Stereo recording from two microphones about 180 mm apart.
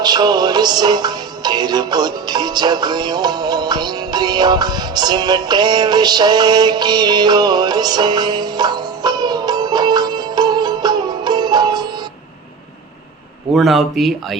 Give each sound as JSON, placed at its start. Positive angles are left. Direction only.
{"t": 0.0, "sound": "music", "side_deg": -25}
{"t": 13.5, "sound": "speech", "side_deg": 0}